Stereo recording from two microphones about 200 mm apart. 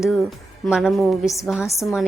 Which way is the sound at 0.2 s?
Centre (ahead or behind).